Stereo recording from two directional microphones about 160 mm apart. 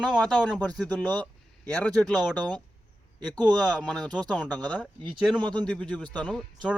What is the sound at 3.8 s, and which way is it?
Speech, centre (ahead or behind).